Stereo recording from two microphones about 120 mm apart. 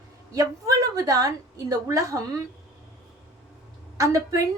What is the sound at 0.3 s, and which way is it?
A woman's voice, 30° right (ahead or behind).